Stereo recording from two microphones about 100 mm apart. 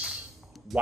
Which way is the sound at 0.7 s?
Centre (ahead or behind).